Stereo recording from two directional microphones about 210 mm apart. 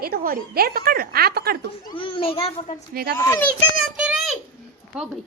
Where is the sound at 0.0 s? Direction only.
45° right (ahead or behind).